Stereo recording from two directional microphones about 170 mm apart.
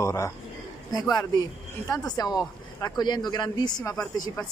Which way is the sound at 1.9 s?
20° left (ahead or behind).